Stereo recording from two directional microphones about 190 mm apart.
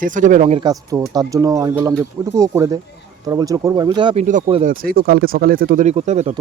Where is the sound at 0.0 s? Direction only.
40° right (ahead or behind).